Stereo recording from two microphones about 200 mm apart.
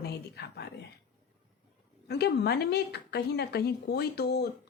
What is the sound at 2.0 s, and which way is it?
Speech, 55° left (ahead or behind).